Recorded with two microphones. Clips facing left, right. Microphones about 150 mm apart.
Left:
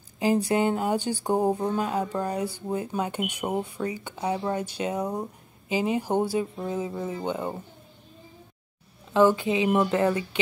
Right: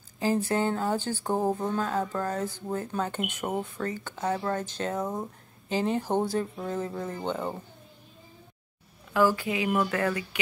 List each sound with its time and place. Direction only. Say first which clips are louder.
0.2 s speech: left 3 dB; 15° left (ahead or behind)
9.1 s speech: left 4 dB; 20° left (ahead or behind)